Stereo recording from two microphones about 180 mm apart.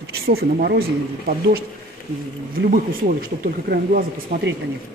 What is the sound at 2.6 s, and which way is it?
Speech, 50° right (ahead or behind).